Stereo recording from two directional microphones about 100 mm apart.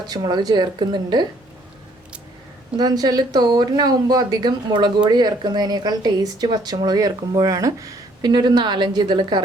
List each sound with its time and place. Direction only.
0.1 s speech: 45° right (ahead or behind)
2.7 s speech: 40° right (ahead or behind)